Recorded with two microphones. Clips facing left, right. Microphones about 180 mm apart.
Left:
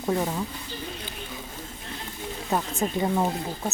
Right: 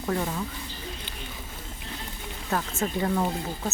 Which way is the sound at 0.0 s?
20° left (ahead or behind).